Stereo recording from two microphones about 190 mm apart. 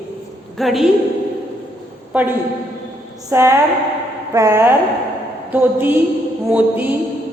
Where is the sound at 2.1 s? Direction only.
5° right (ahead or behind).